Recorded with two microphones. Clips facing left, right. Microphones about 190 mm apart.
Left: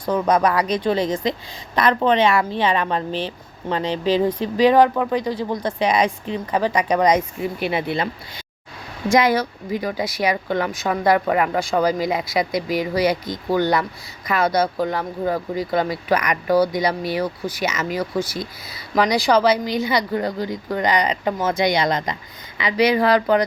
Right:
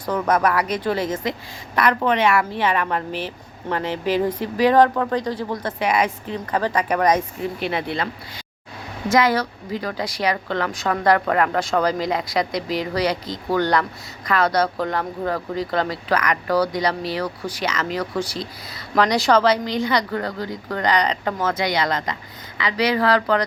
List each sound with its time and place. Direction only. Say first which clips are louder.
0.0 s a woman's voice: left 2 dB; 15° left (ahead or behind)